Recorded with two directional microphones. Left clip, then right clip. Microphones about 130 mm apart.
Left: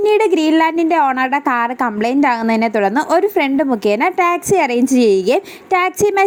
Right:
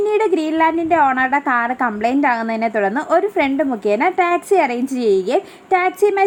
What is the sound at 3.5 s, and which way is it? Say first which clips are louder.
A woman's voice: left 2 dB; 30° left (ahead or behind).